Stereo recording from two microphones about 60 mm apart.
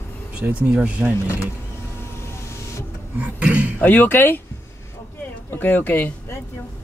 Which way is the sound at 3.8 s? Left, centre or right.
Left.